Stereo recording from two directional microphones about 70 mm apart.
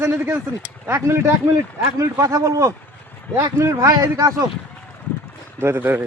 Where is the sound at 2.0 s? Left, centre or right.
Right.